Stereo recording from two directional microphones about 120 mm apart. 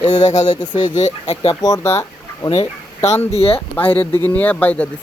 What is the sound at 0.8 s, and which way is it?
Speech, 75° left (ahead or behind).